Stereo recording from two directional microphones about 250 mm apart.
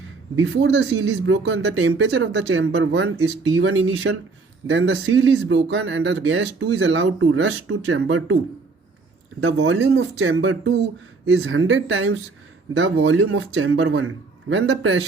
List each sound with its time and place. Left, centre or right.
0.3 s speech: right
9.4 s speech: right